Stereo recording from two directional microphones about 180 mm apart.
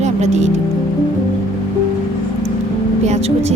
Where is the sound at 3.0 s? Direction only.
35° right (ahead or behind).